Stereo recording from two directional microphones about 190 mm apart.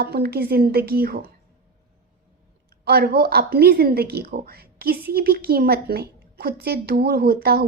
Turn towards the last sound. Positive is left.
turn(degrees=-55)  # may be behind; listen again after turning